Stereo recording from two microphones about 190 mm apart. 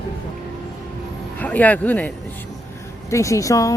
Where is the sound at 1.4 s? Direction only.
10° left (ahead or behind).